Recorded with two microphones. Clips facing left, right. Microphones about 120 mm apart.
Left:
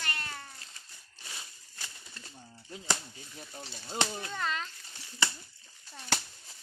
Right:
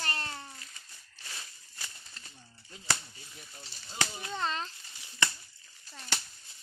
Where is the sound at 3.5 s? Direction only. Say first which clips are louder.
Left 9 dB; 45° left (ahead or behind).